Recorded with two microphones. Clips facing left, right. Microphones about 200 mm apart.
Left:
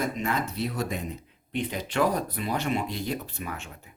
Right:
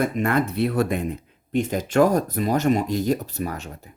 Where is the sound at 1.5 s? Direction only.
45° right (ahead or behind).